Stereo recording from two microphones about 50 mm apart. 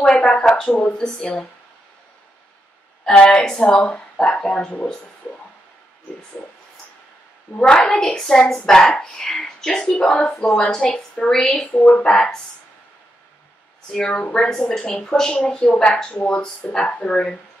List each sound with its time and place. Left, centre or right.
0.2 s speech: centre
3.2 s speech: centre
7.6 s speech: centre
11.6 s speech: left
12.0 s speech: centre
13.9 s speech: centre